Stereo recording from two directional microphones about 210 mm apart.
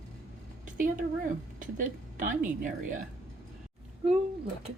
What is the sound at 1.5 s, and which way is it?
A woman's voice, 40° right (ahead or behind).